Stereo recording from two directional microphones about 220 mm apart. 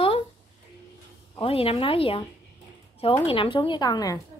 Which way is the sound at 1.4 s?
25° left (ahead or behind).